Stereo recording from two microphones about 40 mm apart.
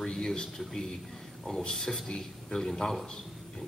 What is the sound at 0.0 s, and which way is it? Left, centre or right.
A man's voice, centre.